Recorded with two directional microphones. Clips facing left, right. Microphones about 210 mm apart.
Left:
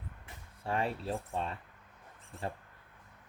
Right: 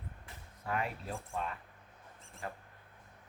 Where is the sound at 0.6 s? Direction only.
30° left (ahead or behind).